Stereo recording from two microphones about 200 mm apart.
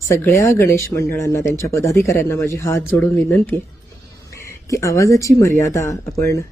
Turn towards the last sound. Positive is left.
turn(degrees=15)  # may be behind; listen again after turning